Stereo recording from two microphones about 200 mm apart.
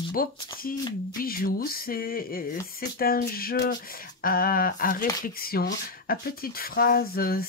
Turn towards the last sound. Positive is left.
turn(degrees=50)  # may be behind; listen again after turning